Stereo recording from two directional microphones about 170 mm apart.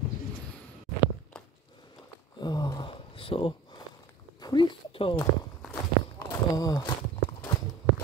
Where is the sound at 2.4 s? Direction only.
25° left (ahead or behind).